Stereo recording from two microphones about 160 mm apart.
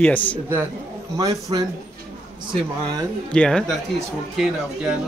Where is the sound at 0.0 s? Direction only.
10° left (ahead or behind).